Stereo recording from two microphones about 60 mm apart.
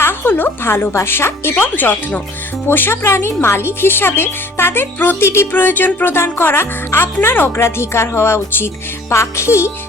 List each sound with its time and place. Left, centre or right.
0.0 s speech: left
0.9 s music: left